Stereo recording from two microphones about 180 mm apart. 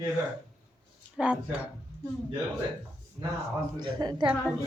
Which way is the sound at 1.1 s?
5° right (ahead or behind).